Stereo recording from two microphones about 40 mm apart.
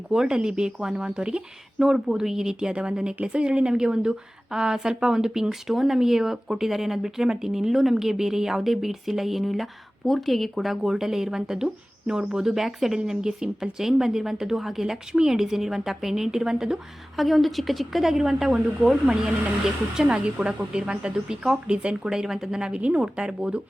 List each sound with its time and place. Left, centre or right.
0.1 s speech: centre
1.8 s speech: centre
17.2 s speech: centre
22.8 s speech: right